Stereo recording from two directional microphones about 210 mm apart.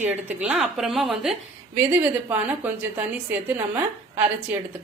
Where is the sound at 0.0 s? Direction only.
5° right (ahead or behind).